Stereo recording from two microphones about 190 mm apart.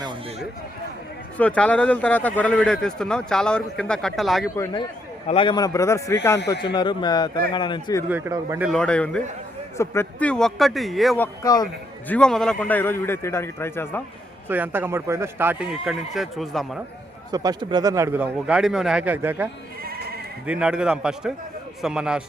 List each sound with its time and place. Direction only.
0.0 s a sound: 25° right (ahead or behind)
1.4 s speech: 5° left (ahead or behind)
4.5 s a man's voice: 15° left (ahead or behind)
6.4 s speech: 60° left (ahead or behind)
6.7 s a man's voice: 25° left (ahead or behind)
8.1 s speech: 15° right (ahead or behind)
8.6 s speech: 5° left (ahead or behind)
11.2 s a man's voice: 20° left (ahead or behind)
12.0 s a man's voice: 5° left (ahead or behind)
14.4 s speech: 10° right (ahead or behind)
17.3 s speech: 20° right (ahead or behind)
20.5 s speech: 5° right (ahead or behind)